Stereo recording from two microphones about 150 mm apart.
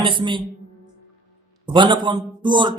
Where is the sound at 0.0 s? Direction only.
35° right (ahead or behind).